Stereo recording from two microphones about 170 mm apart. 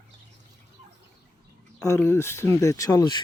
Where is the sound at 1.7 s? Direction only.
15° left (ahead or behind).